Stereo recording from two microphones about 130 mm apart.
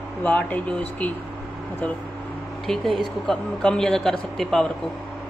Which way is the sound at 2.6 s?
Centre (ahead or behind).